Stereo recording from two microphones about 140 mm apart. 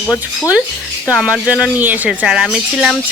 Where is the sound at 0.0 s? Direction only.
10° left (ahead or behind).